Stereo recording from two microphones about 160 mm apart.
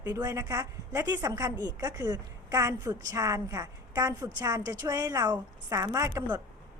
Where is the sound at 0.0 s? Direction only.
20° right (ahead or behind).